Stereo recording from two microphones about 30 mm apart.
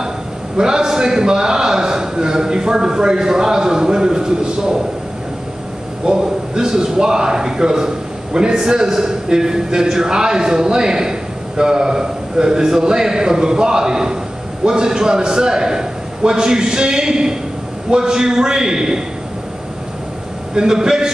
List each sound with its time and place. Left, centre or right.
0.6 s a man's voice: right
6.0 s a man's voice: right
20.5 s a man's voice: right